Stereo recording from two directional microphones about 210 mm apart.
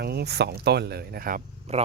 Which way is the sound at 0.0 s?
50° right (ahead or behind).